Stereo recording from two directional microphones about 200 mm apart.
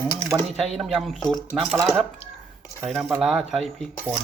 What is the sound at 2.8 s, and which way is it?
Speech, 10° right (ahead or behind).